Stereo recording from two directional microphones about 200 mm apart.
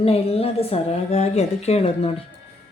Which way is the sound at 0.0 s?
30° left (ahead or behind).